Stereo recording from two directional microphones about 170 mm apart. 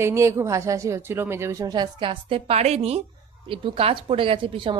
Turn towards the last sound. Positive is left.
turn(degrees=-30)  # may be behind; listen again after turning